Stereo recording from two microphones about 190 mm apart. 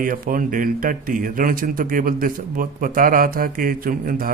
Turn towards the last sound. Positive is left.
turn(degrees=-50)  # may be behind; listen again after turning